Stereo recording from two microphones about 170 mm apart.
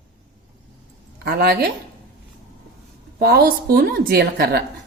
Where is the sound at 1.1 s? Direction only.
65° right (ahead or behind).